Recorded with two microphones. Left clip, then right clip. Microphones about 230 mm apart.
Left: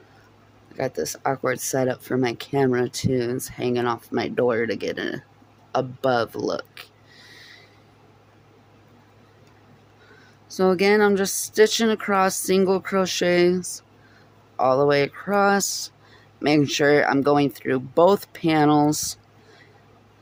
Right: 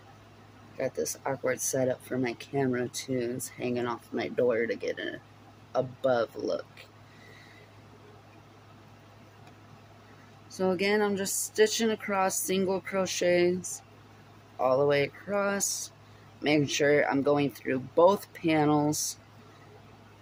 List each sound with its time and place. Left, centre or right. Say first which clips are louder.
0.8 s speech: left 6 dB; left
10.6 s speech: left 9 dB; left